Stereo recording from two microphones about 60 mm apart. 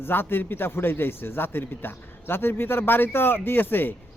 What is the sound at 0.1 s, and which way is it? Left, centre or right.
A man's voice, left.